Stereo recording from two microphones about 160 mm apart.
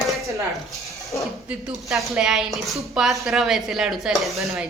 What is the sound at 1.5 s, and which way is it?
A woman's voice, centre (ahead or behind).